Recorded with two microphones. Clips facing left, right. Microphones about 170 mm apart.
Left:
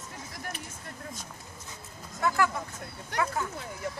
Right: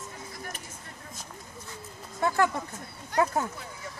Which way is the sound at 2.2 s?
30° right (ahead or behind).